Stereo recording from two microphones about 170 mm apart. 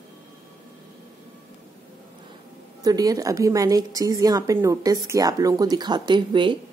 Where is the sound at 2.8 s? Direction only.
20° right (ahead or behind).